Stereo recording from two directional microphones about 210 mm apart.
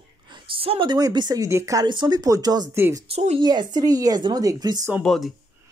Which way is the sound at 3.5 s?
20° right (ahead or behind).